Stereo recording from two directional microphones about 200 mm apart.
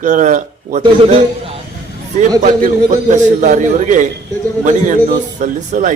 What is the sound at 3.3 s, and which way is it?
Speech, 40° right (ahead or behind).